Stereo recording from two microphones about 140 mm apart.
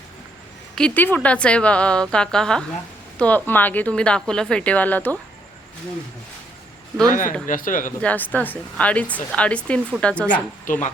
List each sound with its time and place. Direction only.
0.8 s speech: 10° left (ahead or behind)
7.1 s speech: 70° left (ahead or behind)
8.0 s speech: 10° left (ahead or behind)
10.7 s insect: 60° left (ahead or behind)